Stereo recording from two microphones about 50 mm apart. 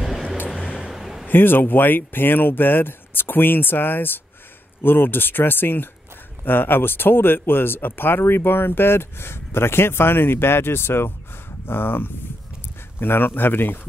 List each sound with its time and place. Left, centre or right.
0.0 s music: centre
0.7 s a sound: centre
1.2 s speech: left